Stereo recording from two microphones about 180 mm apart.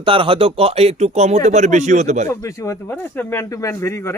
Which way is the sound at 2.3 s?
15° left (ahead or behind).